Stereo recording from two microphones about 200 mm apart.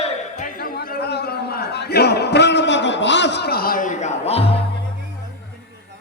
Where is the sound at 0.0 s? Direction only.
40° left (ahead or behind).